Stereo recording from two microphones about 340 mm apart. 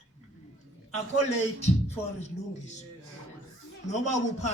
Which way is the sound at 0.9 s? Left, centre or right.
Centre.